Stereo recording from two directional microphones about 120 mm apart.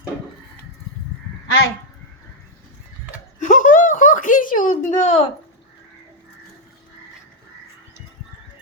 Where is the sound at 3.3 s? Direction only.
90° left; by 5.2 s 70° left (ahead or behind).